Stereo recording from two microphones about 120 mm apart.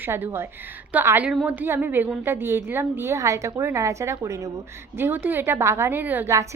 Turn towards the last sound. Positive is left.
turn(degrees=-15)  # may be behind; listen again after turning